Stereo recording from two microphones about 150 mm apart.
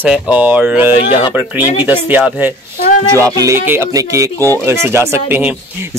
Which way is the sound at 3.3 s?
20° right (ahead or behind).